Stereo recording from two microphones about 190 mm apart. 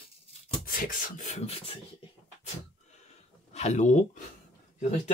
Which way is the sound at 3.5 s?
40° left (ahead or behind).